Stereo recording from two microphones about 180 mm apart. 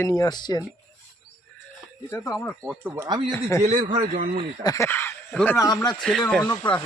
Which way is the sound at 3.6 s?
45° right (ahead or behind).